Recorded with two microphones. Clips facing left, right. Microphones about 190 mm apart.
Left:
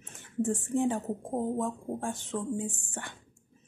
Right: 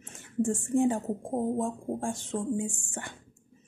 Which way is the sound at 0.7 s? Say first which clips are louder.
Right 3 dB; 15° right (ahead or behind).